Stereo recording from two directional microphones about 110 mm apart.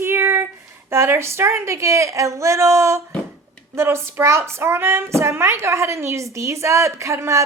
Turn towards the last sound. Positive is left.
turn(degrees=-25)  # may be behind; listen again after turning